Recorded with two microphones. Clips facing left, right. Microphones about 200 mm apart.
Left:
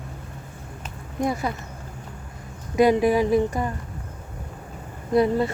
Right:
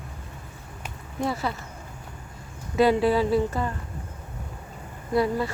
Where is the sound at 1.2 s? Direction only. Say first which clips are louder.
Left 3 dB; 15° left (ahead or behind).